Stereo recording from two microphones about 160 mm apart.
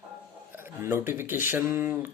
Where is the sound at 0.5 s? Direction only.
15° right (ahead or behind).